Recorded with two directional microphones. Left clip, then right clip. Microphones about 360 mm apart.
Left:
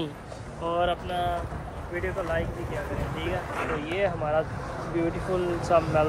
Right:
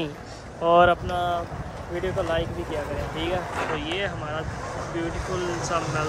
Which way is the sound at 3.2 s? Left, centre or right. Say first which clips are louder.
Right 4 dB; right.